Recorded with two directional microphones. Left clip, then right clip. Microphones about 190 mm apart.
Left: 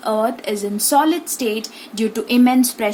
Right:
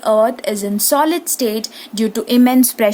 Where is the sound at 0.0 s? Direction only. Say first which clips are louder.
Right 6 dB; 45° right (ahead or behind).